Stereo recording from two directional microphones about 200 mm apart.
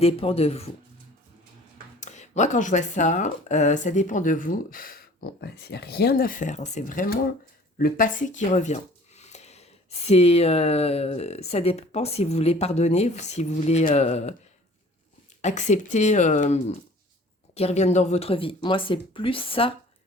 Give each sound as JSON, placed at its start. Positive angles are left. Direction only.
{"t": 0.0, "sound": "speech", "side_deg": 30}
{"t": 2.0, "sound": "speech", "side_deg": 35}
{"t": 15.4, "sound": "speech", "side_deg": 35}